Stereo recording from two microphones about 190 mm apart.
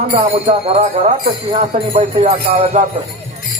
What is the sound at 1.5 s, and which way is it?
Speech, 30° right (ahead or behind).